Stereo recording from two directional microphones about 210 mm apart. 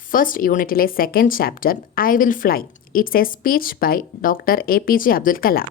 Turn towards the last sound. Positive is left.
turn(degrees=45)  # may be behind; listen again after turning